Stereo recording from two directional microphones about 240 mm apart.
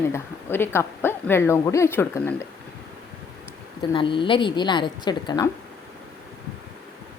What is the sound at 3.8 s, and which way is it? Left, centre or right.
A woman's voice, left.